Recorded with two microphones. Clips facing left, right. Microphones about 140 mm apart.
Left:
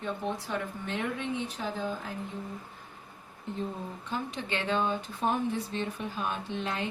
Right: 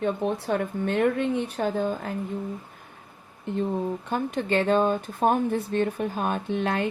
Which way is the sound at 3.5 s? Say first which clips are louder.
Right 8 dB; 70° right (ahead or behind).